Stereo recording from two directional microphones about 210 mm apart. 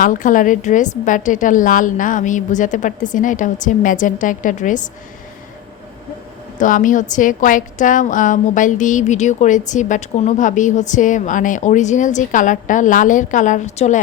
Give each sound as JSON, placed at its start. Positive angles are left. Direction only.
{"t": 0.0, "sound": "a woman's voice", "side_deg": 40}
{"t": 6.6, "sound": "a woman's voice", "side_deg": 40}